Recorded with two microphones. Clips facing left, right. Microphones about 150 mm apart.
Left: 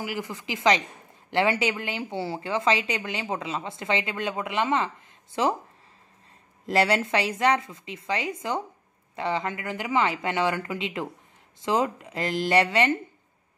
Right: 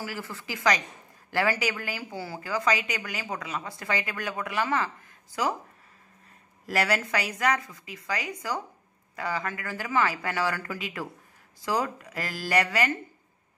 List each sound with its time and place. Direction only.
0.0 s a woman's voice: 20° left (ahead or behind)
6.6 s a woman's voice: 25° left (ahead or behind)